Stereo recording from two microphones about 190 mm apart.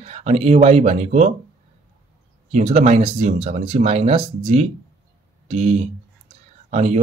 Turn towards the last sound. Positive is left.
turn(degrees=-35)  # may be behind; listen again after turning